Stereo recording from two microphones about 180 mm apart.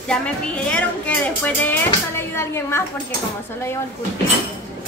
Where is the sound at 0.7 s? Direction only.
10° left (ahead or behind).